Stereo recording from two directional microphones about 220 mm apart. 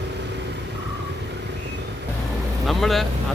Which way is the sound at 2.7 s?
Centre (ahead or behind).